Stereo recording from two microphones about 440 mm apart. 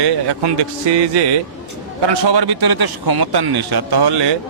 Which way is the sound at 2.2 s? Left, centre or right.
Right.